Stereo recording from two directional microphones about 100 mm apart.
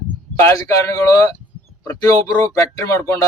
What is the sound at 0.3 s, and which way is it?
A man's voice, 30° left (ahead or behind).